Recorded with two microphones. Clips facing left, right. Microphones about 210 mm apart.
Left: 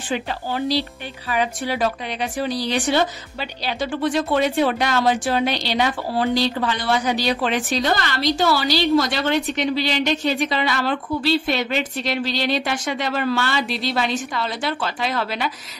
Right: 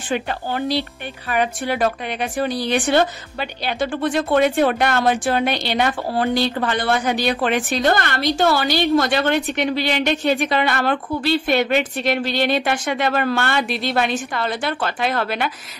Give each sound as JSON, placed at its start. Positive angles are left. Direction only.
{"t": 0.1, "sound": "speech", "side_deg": -55}